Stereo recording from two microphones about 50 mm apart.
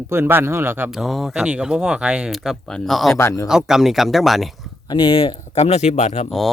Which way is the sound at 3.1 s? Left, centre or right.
Left.